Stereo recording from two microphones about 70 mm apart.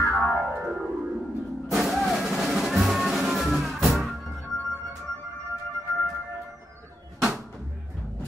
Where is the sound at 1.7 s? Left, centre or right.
Centre.